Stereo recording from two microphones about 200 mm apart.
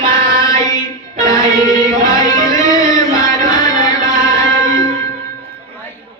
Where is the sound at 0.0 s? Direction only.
15° left (ahead or behind).